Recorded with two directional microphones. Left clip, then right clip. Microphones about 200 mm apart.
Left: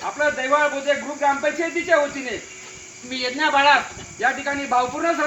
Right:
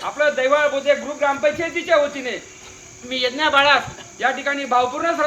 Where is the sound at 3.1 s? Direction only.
20° right (ahead or behind).